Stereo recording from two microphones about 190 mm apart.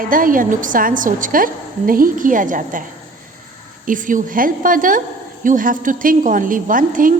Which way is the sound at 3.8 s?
45° right (ahead or behind).